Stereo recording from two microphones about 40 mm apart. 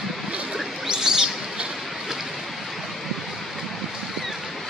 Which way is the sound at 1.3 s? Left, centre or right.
Centre.